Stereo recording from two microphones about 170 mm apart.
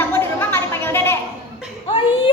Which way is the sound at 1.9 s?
30° left (ahead or behind).